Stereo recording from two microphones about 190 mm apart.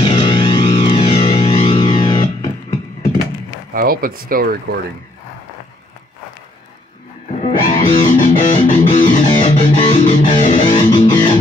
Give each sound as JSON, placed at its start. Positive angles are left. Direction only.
{"t": 0.0, "sound": "music", "side_deg": 25}
{"t": 3.7, "sound": "speech", "side_deg": -50}
{"t": 7.3, "sound": "music", "side_deg": 40}
{"t": 9.4, "sound": "music", "side_deg": 25}
{"t": 9.8, "sound": "music", "side_deg": 40}
{"t": 10.7, "sound": "music", "side_deg": 25}